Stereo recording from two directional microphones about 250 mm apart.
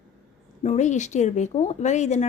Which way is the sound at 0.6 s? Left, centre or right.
Left.